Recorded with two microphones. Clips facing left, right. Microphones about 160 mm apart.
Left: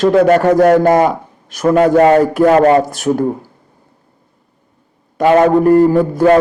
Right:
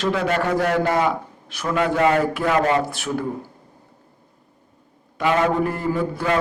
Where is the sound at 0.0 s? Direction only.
45° left (ahead or behind).